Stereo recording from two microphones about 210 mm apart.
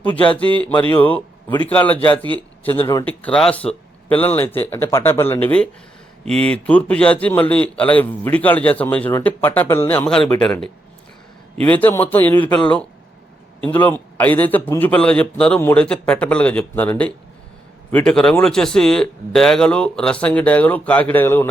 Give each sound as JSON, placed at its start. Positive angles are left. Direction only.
{"t": 0.0, "sound": "a man's voice", "side_deg": 5}
{"t": 2.7, "sound": "speech", "side_deg": 20}
{"t": 3.0, "sound": "a man's voice", "side_deg": 5}